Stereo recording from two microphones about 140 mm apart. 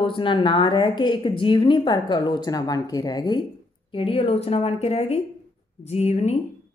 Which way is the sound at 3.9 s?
40° left (ahead or behind).